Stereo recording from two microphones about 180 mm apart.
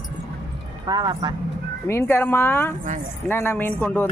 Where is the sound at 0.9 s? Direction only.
20° right (ahead or behind).